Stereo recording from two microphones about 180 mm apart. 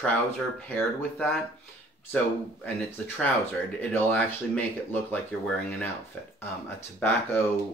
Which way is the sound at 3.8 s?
10° left (ahead or behind).